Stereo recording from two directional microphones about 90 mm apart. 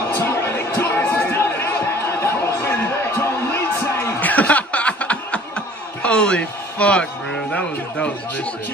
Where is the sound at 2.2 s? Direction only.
25° left (ahead or behind).